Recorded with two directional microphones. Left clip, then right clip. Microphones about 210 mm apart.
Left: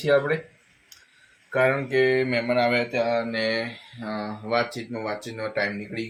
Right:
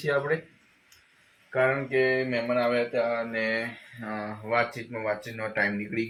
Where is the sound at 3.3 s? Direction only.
15° left (ahead or behind).